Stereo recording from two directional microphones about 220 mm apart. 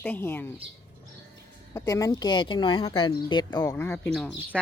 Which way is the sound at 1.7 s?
15° left (ahead or behind).